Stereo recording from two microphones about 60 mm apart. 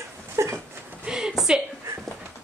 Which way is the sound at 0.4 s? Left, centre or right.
Right.